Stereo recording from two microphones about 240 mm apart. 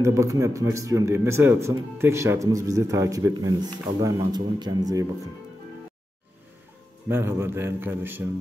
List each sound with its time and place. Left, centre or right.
0.0 s speech: centre
7.1 s speech: centre